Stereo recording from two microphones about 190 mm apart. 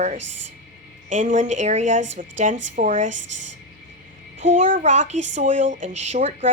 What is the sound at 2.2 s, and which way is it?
Speech, 45° right (ahead or behind).